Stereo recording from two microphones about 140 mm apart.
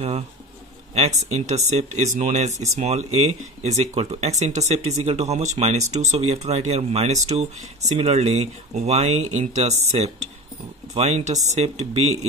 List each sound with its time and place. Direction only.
0.9 s speech: 55° right (ahead or behind)